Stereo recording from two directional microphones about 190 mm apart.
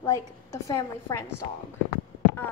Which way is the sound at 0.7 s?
15° left (ahead or behind).